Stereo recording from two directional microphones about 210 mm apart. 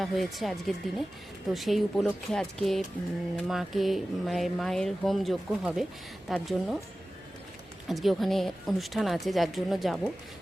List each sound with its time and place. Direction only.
0.0 s speech: centre (ahead or behind)
7.9 s speech: centre (ahead or behind)